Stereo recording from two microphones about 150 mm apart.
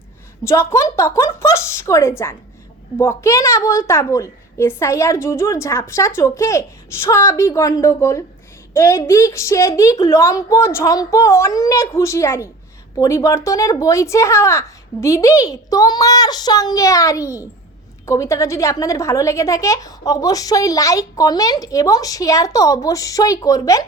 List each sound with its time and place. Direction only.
0.4 s a woman's voice: 15° left (ahead or behind)